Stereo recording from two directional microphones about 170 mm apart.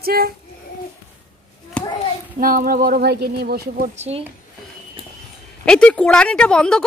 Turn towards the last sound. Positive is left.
turn(degrees=5)  # may be behind; listen again after turning